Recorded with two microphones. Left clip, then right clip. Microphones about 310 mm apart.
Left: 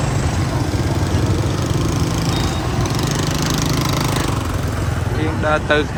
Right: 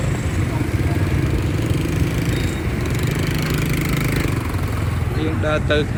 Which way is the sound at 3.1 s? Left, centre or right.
Left.